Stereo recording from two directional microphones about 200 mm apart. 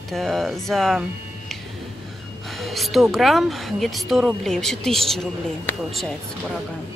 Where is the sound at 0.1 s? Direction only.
Centre (ahead or behind).